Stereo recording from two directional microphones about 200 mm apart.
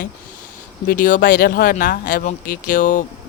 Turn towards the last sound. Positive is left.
turn(degrees=40)  # may be behind; listen again after turning